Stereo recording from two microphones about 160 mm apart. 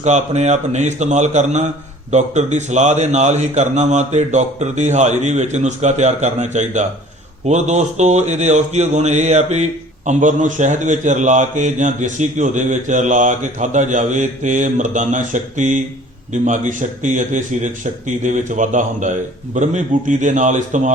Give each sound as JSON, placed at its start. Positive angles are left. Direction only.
{"t": 0.0, "sound": "a man's voice", "side_deg": -45}